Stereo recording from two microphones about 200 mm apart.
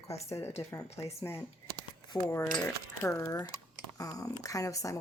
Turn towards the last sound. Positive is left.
turn(degrees=15)  # may be behind; listen again after turning